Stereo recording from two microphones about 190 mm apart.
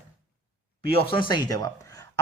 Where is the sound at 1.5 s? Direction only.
20° left (ahead or behind).